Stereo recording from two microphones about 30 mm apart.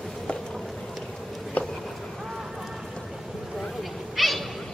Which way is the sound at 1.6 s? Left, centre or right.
Left.